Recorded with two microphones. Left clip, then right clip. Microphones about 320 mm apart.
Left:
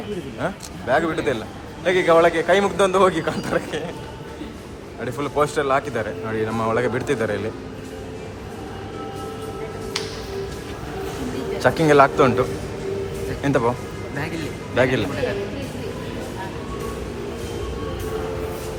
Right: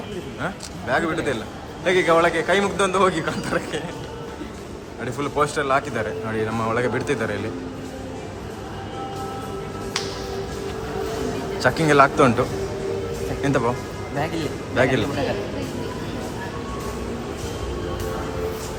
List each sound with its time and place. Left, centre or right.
0.4 s speech: centre
5.0 s speech: centre
11.6 s speech: centre
14.8 s speech: centre